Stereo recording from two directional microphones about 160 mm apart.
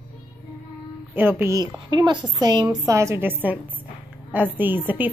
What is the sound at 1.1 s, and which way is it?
A woman's voice, 15° right (ahead or behind).